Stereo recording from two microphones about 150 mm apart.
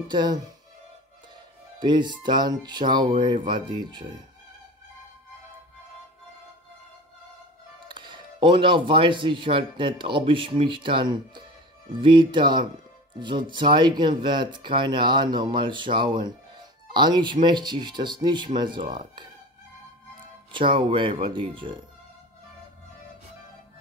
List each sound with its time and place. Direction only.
0.1 s speech: 30° right (ahead or behind)
1.8 s speech: 30° right (ahead or behind)
7.9 s speech: 30° right (ahead or behind)
20.5 s speech: 35° right (ahead or behind)